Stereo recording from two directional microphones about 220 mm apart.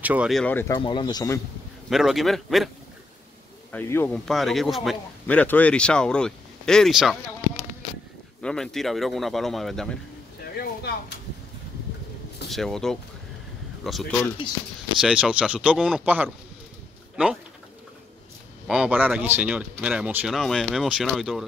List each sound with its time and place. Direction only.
0.0 s a man's voice: 5° right (ahead or behind)
0.7 s speech: 20° left (ahead or behind)
1.9 s a man's voice: centre (ahead or behind)
3.7 s a man's voice: 10° left (ahead or behind)
8.4 s a man's voice: 5° left (ahead or behind)
10.5 s a sound: 45° left (ahead or behind)
12.4 s a man's voice: centre (ahead or behind)
18.7 s a man's voice: 5° right (ahead or behind)